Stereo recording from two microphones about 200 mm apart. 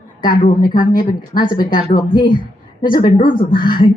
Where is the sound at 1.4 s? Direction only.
25° left (ahead or behind).